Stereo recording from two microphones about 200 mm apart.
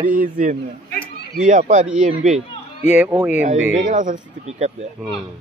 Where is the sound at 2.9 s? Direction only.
10° right (ahead or behind).